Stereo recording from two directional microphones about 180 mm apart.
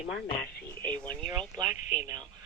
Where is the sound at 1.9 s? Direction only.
15° right (ahead or behind).